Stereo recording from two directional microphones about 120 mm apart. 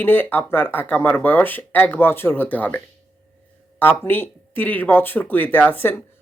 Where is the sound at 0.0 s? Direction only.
15° left (ahead or behind).